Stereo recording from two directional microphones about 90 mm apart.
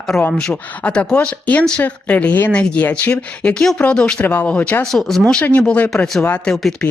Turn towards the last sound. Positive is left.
turn(degrees=5)  # may be behind; listen again after turning